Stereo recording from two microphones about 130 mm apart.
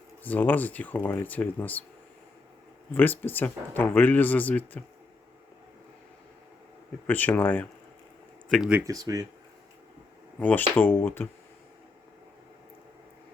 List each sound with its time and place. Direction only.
0.2 s speech: 15° left (ahead or behind)
2.9 s speech: 15° left (ahead or behind)
7.1 s speech: 15° left (ahead or behind)
8.4 s speech: 5° left (ahead or behind)
8.8 s speech: 25° right (ahead or behind)
10.8 s speech: 15° left (ahead or behind)